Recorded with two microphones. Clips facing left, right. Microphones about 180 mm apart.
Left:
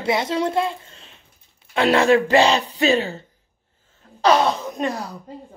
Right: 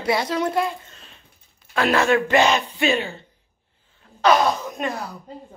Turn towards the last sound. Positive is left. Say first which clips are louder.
# left 2 dB
turn(degrees=30)  # may be behind; listen again after turning